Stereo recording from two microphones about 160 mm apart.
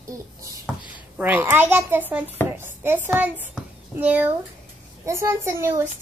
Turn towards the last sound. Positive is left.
turn(degrees=-15)  # may be behind; listen again after turning